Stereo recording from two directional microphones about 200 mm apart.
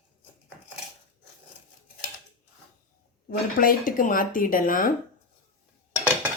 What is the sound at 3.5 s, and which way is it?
Speech, 40° left (ahead or behind).